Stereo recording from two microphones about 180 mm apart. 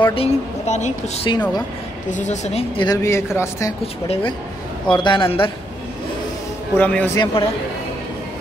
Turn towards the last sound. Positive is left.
turn(degrees=30)  # may be behind; listen again after turning